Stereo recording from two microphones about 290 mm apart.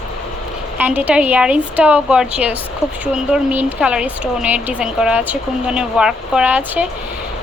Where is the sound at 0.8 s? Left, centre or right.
Centre.